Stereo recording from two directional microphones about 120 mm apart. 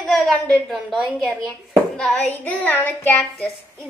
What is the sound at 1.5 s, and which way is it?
Child singing, 5° left (ahead or behind).